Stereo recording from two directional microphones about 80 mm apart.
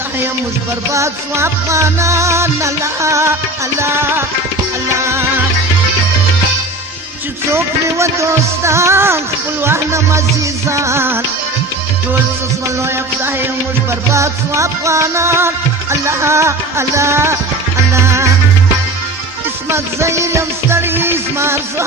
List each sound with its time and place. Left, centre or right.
0.9 s music: right
7.5 s music: right
14.1 s music: right
19.7 s music: right